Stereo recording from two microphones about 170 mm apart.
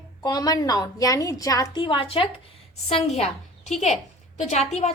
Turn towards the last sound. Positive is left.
turn(degrees=40)  # may be behind; listen again after turning